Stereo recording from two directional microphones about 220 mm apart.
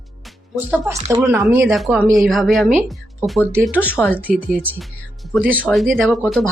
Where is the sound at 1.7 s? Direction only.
Centre (ahead or behind).